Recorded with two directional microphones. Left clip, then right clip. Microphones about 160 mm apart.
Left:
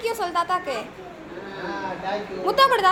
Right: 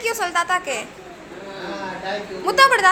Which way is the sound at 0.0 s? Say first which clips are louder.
Right 3 dB; 5° left (ahead or behind).